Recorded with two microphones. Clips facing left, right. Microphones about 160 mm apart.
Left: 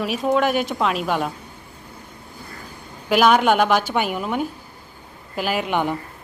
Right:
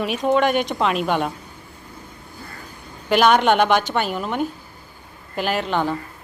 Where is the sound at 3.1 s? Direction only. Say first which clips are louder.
Even; 5° left (ahead or behind).